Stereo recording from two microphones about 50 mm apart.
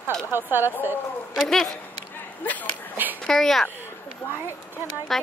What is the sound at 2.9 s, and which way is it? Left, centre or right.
Speech, right.